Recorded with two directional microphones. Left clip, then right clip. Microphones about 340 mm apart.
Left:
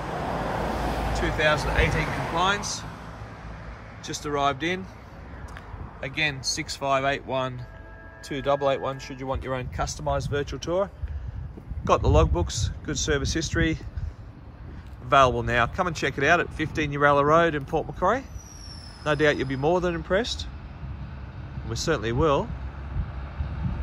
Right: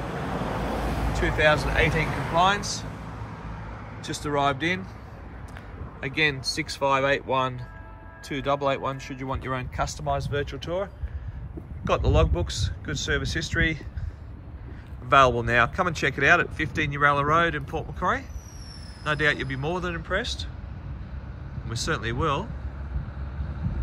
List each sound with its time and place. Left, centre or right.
0.4 s vehicle: left
1.1 s speech: centre
4.0 s speech: centre
5.9 s speech: centre
15.0 s speech: centre
21.6 s speech: centre